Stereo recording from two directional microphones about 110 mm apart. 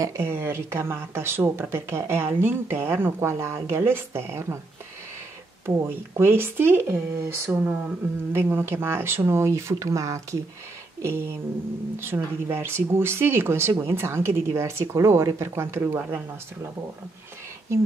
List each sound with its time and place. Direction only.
0.0 s speech: 25° right (ahead or behind)
5.7 s speech: 25° right (ahead or behind)